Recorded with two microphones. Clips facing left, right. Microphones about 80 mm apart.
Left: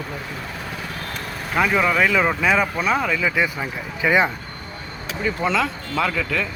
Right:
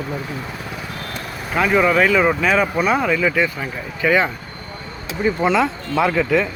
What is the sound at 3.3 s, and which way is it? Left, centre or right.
Speech, centre.